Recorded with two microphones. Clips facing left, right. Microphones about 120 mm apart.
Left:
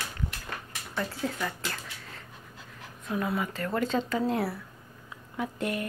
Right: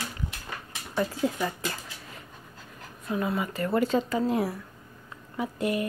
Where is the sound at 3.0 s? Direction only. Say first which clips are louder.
Right 1 dB; centre (ahead or behind).